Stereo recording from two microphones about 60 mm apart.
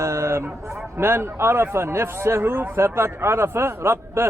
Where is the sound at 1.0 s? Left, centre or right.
Right.